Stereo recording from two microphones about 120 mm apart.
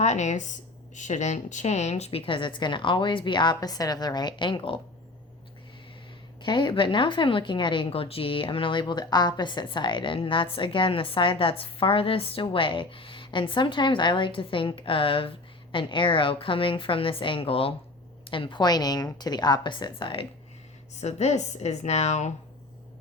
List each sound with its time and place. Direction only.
0.0 s speech: 75° left (ahead or behind); by 4.8 s 45° left (ahead or behind)
6.4 s a woman's voice: 40° left (ahead or behind)
20.9 s a woman's voice: 70° left (ahead or behind)